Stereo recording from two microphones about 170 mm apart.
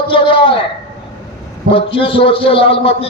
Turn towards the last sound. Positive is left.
turn(degrees=35)  # may be behind; listen again after turning